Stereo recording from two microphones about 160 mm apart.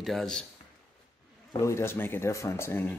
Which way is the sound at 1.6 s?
15° left (ahead or behind).